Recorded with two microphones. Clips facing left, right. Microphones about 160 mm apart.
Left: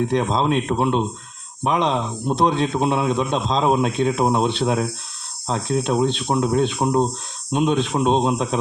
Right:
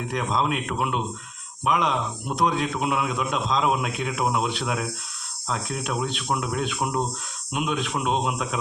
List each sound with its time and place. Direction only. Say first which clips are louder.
0.1 s a man's voice: left 6 dB; 30° left (ahead or behind)